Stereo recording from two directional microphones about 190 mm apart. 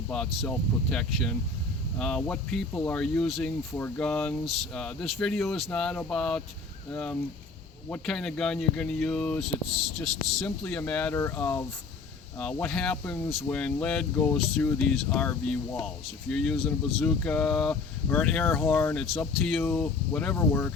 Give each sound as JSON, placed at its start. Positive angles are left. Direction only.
{"t": 0.1, "sound": "speech", "side_deg": 5}